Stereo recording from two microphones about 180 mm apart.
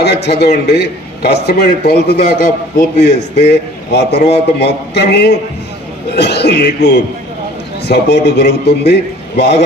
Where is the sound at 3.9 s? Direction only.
65° left (ahead or behind).